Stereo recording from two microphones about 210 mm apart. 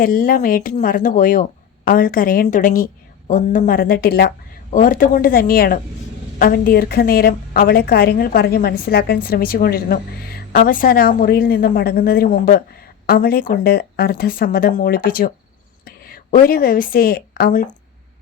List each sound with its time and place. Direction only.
0.0 s a woman's voice: 40° left (ahead or behind)